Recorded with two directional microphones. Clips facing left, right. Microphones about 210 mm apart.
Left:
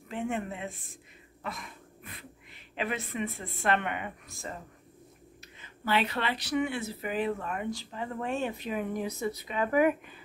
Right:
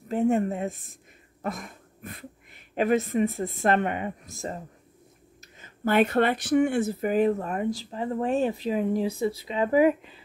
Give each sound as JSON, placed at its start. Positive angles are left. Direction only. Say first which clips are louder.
{"t": 0.1, "sound": "speech", "louder": "right 10 dB", "side_deg": -40}
{"t": 5.6, "sound": "speech", "louder": "right 7 dB", "side_deg": -50}